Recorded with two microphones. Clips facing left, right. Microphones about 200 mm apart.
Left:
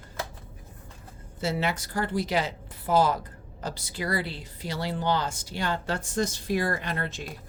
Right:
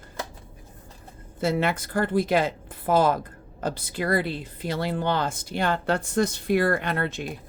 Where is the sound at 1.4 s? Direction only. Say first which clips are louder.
Right 4 dB; 55° right (ahead or behind).